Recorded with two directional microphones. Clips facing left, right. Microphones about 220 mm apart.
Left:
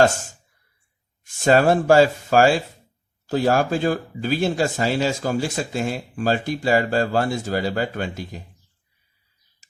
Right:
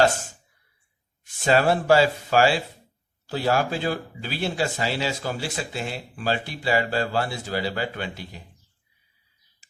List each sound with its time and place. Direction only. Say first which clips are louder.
0.0 s speech: left 3 dB; 45° left (ahead or behind)